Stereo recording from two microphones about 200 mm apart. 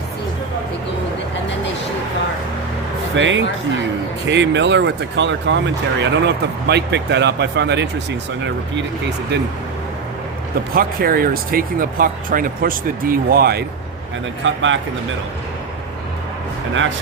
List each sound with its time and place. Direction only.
3.2 s speech: 65° right (ahead or behind)
10.8 s speech: 45° right (ahead or behind)
14.4 s speech: 70° right (ahead or behind)